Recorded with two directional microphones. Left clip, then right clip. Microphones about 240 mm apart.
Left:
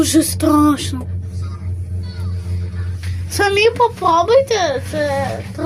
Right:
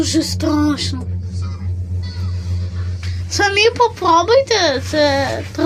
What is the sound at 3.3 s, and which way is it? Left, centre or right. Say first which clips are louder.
A woman's voice: even; centre.